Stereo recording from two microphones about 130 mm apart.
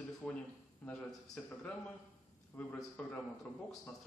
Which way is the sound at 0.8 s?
5° left (ahead or behind).